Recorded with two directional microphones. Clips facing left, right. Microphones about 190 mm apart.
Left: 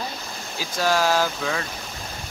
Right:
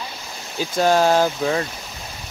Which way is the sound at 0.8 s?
25° right (ahead or behind).